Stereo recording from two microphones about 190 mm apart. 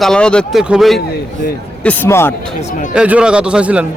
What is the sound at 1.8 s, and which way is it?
Speech, 10° left (ahead or behind).